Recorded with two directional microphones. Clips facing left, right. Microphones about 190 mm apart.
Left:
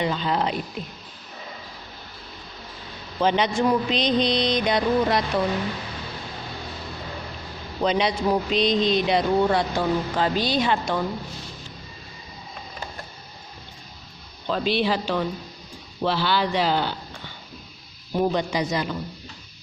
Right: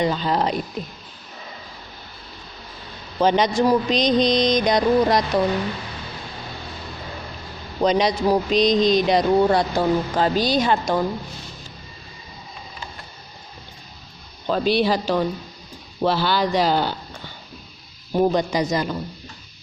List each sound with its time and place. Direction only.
0.0 s speech: 40° right (ahead or behind)
3.2 s speech: 40° right (ahead or behind)
7.8 s speech: 40° right (ahead or behind)
14.4 s speech: 40° right (ahead or behind)
18.1 s a man's voice: 40° right (ahead or behind)